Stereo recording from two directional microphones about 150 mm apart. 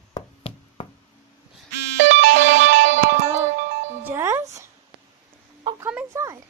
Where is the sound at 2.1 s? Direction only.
55° right (ahead or behind).